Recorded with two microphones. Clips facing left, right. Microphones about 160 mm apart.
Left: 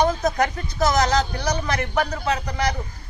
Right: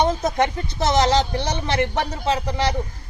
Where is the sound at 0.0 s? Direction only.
25° right (ahead or behind).